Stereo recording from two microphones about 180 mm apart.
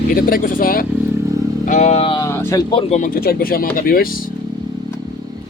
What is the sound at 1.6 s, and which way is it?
Speech, 45° left (ahead or behind).